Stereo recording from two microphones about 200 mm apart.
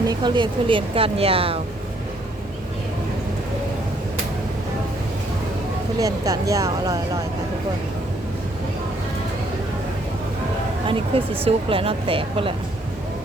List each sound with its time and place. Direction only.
0.1 s speech: 20° right (ahead or behind)
6.0 s speech: 15° right (ahead or behind)
10.8 s speech: 25° right (ahead or behind)